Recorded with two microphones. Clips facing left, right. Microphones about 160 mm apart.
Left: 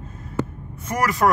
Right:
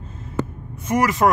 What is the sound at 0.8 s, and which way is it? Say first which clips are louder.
Speech: right 2 dB; 20° right (ahead or behind).